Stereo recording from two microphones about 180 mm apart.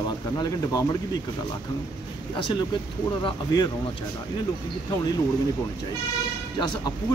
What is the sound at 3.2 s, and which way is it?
Speech, 25° left (ahead or behind).